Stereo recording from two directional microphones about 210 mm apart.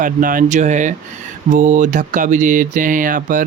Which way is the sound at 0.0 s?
40° right (ahead or behind).